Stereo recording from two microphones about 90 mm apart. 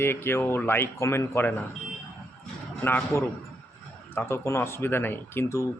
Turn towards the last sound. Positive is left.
turn(degrees=30)  # may be behind; listen again after turning